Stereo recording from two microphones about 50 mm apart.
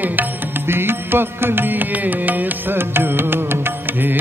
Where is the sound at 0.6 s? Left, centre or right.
Right.